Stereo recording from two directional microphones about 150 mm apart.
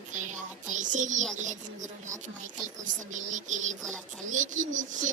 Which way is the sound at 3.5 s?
55° right (ahead or behind).